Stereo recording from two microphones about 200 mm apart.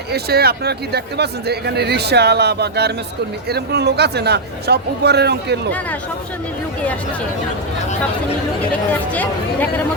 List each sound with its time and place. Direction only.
0.1 s speech: 50° right (ahead or behind)
8.9 s speech: 10° left (ahead or behind)